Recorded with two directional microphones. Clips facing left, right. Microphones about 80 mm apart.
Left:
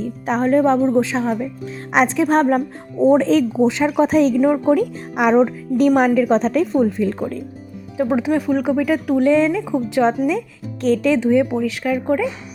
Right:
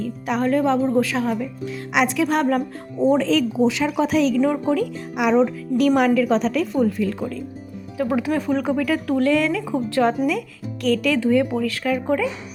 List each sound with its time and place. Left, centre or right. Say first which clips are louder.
0.0 s speech: left 3 dB; left
7.9 s speech: left 3 dB; left
8.3 s speech: left 3 dB; centre